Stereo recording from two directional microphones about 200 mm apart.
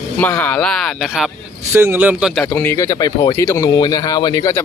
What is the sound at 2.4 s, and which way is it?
Speech, 10° left (ahead or behind).